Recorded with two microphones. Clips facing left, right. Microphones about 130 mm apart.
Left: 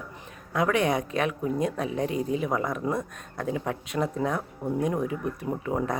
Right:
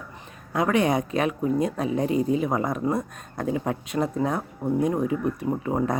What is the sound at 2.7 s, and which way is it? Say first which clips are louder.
Speech: right 3 dB; 35° right (ahead or behind).